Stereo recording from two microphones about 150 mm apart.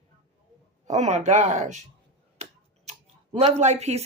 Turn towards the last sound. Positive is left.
turn(degrees=-45)  # may be behind; listen again after turning